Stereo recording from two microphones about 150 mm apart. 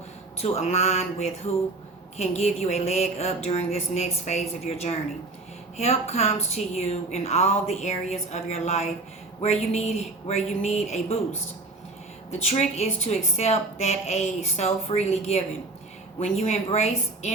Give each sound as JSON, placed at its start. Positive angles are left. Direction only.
{"t": 0.4, "sound": "a woman's voice", "side_deg": 45}
{"t": 12.3, "sound": "a woman's voice", "side_deg": 45}